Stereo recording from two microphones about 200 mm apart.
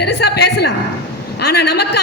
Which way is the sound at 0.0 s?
55° left (ahead or behind).